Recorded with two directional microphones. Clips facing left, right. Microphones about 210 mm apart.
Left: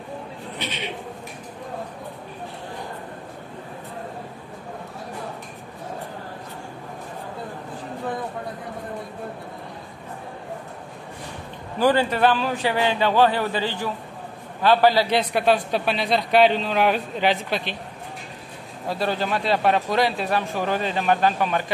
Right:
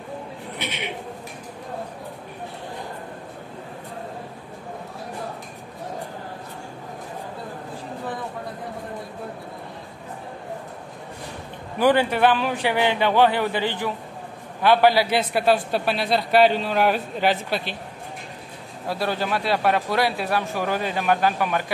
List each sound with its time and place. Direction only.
11.8 s a man's voice: 15° right (ahead or behind)
18.9 s a man's voice: 10° right (ahead or behind)